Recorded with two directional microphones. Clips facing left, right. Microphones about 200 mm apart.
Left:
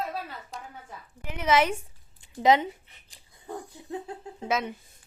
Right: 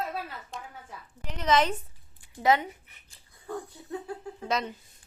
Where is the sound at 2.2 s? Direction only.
20° left (ahead or behind).